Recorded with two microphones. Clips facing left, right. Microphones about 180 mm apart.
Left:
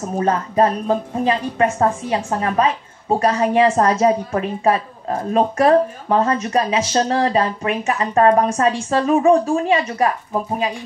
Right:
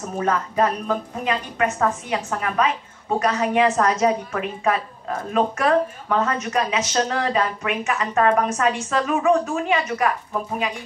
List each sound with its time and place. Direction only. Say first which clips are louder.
0.2 s a woman's voice: left 4 dB; 30° left (ahead or behind)